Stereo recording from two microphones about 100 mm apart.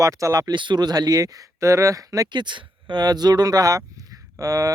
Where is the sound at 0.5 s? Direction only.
50° right (ahead or behind).